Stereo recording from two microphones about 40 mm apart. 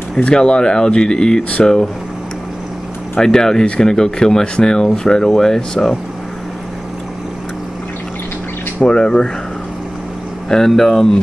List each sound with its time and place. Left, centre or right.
0.2 s speech: left
3.2 s speech: centre
3.6 s speech: left
8.8 s speech: centre
10.5 s speech: left